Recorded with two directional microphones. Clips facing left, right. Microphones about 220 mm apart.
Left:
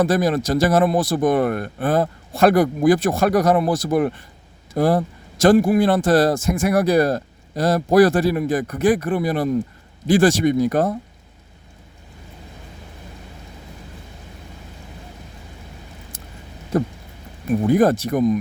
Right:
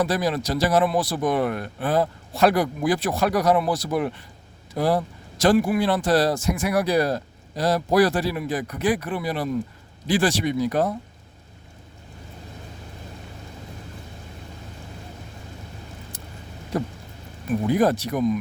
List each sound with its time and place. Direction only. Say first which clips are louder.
0.0 s a man's voice: left 5 dB; 50° left (ahead or behind)
17.7 s a man's voice: left 4 dB; 50° left (ahead or behind)